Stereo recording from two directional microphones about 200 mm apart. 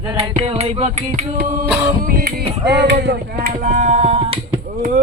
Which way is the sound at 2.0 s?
50° right (ahead or behind).